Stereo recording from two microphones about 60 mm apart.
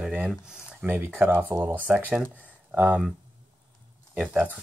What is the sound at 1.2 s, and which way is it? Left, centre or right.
Speech, right.